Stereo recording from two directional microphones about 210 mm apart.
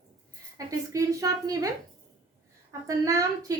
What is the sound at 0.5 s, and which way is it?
A woman's voice, 15° right (ahead or behind).